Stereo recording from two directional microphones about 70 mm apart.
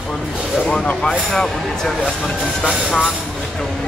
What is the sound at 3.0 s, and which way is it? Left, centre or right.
Speech, centre.